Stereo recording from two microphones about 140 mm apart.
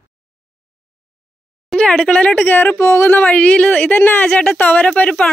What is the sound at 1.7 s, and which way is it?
Speech, 5° left (ahead or behind).